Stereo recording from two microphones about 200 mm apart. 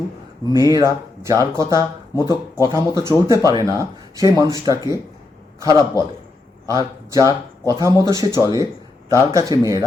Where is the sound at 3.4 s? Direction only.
15° right (ahead or behind).